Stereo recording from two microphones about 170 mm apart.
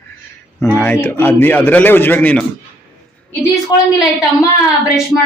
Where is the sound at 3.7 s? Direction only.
25° left (ahead or behind).